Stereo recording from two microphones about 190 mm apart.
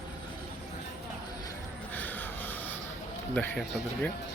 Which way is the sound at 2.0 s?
10° left (ahead or behind).